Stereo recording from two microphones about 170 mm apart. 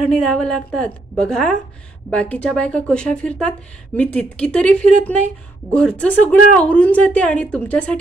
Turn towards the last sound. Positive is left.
turn(degrees=5)  # may be behind; listen again after turning